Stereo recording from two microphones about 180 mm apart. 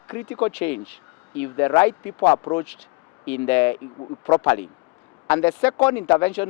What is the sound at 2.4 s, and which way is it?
Speech, 25° left (ahead or behind).